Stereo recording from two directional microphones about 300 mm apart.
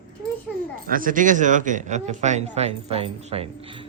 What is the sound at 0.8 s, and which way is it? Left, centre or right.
Speech, right.